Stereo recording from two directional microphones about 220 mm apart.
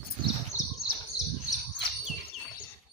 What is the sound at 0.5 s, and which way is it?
Bird, 30° right (ahead or behind).